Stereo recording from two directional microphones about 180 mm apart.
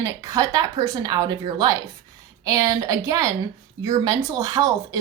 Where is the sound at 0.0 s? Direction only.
15° right (ahead or behind).